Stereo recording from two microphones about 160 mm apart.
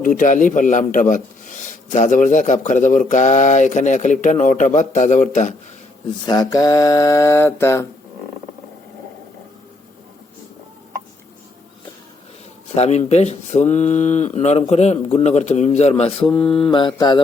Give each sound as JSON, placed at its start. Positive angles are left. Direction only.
{"t": 0.0, "sound": "a man's voice", "side_deg": 55}
{"t": 6.2, "sound": "mantra", "side_deg": 25}
{"t": 12.7, "sound": "a man's voice", "side_deg": 40}
{"t": 16.2, "sound": "mantra", "side_deg": 5}
{"t": 16.6, "sound": "mantra", "side_deg": 30}